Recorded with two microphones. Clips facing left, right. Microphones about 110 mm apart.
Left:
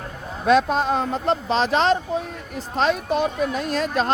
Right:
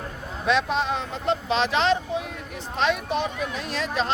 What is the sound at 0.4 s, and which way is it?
Speech, 45° left (ahead or behind).